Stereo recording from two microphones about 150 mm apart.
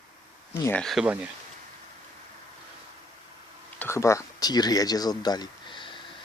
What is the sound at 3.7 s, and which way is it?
Speech, 15° left (ahead or behind).